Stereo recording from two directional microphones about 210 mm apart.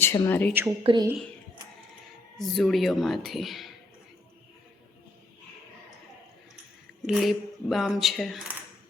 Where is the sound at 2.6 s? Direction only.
Centre (ahead or behind).